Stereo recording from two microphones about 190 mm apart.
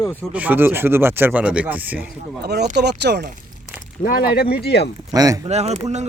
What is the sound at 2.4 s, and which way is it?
Speech, 60° right (ahead or behind).